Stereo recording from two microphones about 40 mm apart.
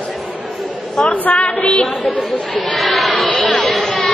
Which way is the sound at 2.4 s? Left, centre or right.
Left.